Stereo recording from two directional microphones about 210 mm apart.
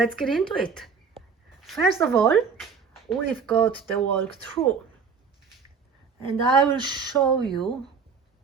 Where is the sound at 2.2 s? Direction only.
5° left (ahead or behind).